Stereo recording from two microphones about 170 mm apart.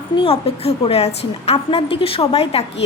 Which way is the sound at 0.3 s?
35° left (ahead or behind).